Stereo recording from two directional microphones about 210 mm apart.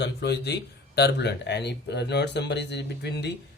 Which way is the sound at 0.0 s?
55° left (ahead or behind).